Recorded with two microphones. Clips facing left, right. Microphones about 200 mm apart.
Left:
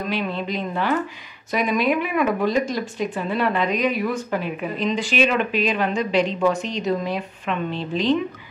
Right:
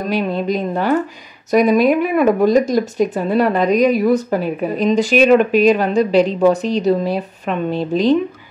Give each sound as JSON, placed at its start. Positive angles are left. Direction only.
{"t": 0.0, "sound": "speech", "side_deg": -40}